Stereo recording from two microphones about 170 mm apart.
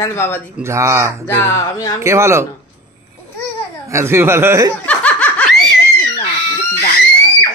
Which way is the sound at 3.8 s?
15° right (ahead or behind).